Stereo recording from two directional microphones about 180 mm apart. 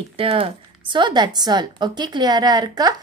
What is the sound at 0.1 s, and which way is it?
Speech, 30° right (ahead or behind).